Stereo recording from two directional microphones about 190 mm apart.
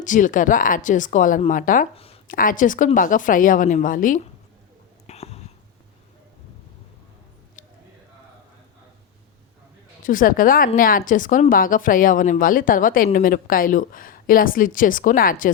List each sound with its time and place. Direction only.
0.0 s a woman's voice: 40° left (ahead or behind)
5.0 s a sound: 35° left (ahead or behind)
10.0 s a woman's voice: 45° left (ahead or behind)